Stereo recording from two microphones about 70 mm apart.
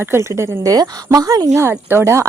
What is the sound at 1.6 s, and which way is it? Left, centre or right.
Speech, right.